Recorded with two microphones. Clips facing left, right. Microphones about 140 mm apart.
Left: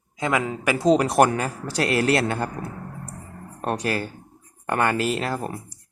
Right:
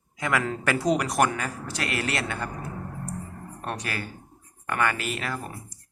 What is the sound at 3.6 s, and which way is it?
Speech, 35° left (ahead or behind).